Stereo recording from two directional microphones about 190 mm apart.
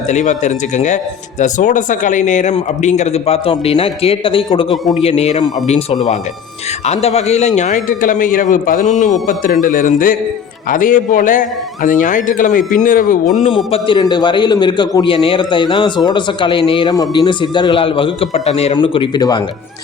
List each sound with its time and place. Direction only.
0.1 s a man's voice: 40° left (ahead or behind); by 19.4 s 20° left (ahead or behind)